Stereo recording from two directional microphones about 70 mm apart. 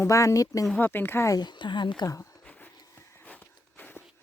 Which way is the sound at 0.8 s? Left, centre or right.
Left.